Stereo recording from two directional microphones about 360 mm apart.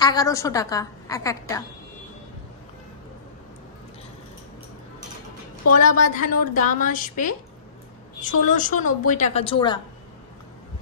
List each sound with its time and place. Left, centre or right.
0.0 s a woman's voice: centre
5.7 s a woman's voice: left